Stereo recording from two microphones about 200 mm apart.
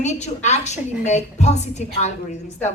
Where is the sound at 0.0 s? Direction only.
35° left (ahead or behind).